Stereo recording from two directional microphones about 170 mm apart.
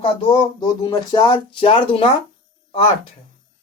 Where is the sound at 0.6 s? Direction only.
25° left (ahead or behind).